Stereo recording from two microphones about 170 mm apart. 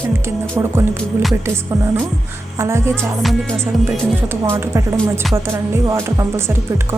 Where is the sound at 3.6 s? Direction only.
15° right (ahead or behind).